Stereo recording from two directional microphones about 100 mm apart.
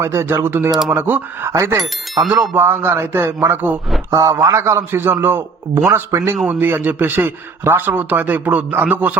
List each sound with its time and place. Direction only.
0.0 s speech: 25° right (ahead or behind)
4.1 s speech: 30° right (ahead or behind)